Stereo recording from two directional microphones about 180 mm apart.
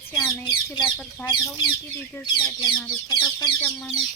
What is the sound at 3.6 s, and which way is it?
Speech, centre (ahead or behind).